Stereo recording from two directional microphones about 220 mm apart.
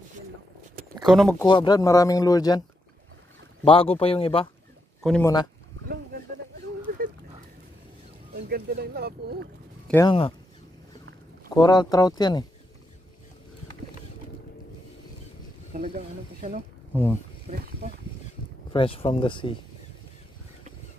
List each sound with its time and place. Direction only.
1.0 s speech: centre (ahead or behind)
1.4 s speech: 20° left (ahead or behind)
3.6 s speech: 25° left (ahead or behind)
8.5 s speech: 45° right (ahead or behind)
10.0 s speech: 25° left (ahead or behind)
11.5 s speech: 20° left (ahead or behind)
15.7 s speech: 35° right (ahead or behind)
16.9 s speech: 10° left (ahead or behind)
17.5 s speech: 30° right (ahead or behind)
18.7 s speech: 25° left (ahead or behind)